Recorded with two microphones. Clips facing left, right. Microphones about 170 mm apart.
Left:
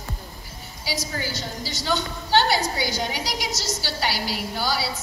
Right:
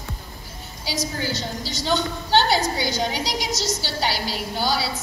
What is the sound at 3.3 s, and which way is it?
A woman's voice, 20° right (ahead or behind).